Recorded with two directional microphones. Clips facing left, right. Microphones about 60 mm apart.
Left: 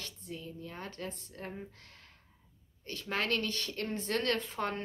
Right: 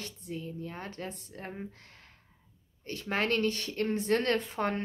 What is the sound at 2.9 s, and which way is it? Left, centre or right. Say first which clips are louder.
Speech: right 3 dB; right.